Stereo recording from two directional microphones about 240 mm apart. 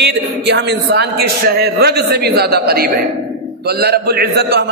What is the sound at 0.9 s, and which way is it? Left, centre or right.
A man's voice, right.